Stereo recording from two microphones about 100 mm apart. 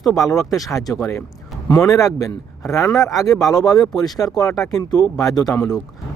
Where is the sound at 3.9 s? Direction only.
Centre (ahead or behind).